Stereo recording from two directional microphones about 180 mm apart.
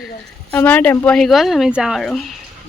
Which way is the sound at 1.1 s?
Centre (ahead or behind).